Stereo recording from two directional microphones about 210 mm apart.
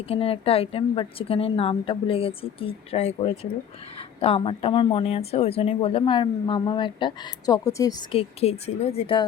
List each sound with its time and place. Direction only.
0.1 s speech: 25° left (ahead or behind)